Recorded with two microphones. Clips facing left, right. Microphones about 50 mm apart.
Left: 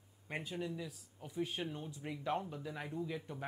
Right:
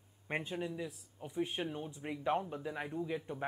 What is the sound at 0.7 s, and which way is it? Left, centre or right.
Speech, right.